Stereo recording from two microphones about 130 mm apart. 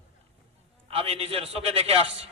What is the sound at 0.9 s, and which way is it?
A man's voice, 50° right (ahead or behind).